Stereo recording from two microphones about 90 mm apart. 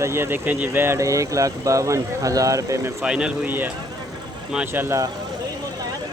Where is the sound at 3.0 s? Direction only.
10° right (ahead or behind).